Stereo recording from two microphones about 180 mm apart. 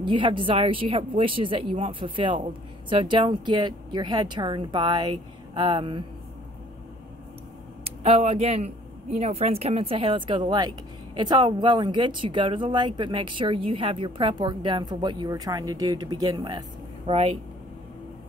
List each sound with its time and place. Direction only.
0.0 s speech: 25° right (ahead or behind)
7.8 s speech: 35° right (ahead or behind)